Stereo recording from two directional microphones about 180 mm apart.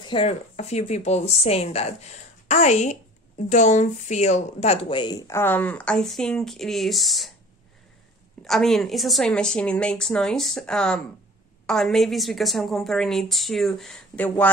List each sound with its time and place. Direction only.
0.0 s speech: 30° left (ahead or behind); by 7.3 s centre (ahead or behind)
8.5 s a woman's voice: centre (ahead or behind)